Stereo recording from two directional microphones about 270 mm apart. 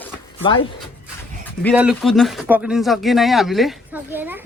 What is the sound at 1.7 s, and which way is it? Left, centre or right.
Speech, centre.